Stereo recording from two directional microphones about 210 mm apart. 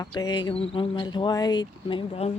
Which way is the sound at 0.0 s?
20° left (ahead or behind).